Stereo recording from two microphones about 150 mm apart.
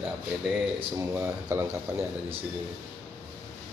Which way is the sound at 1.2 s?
20° right (ahead or behind).